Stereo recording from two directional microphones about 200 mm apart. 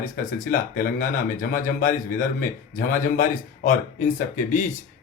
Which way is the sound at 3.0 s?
40° left (ahead or behind).